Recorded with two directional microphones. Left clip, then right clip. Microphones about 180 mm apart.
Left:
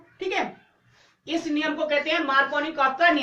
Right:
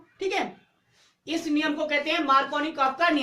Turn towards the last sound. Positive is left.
turn(degrees=-40)  # may be behind; listen again after turning